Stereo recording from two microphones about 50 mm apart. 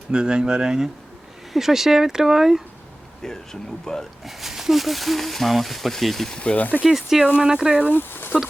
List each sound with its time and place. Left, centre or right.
0.1 s speech: centre
3.2 s speech: centre
4.3 s speech: centre
6.3 s speech: left
6.8 s speech: centre
7.9 s speech: left